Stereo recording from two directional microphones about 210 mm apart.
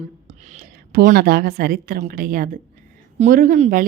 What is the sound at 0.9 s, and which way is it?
A woman's voice, 45° right (ahead or behind).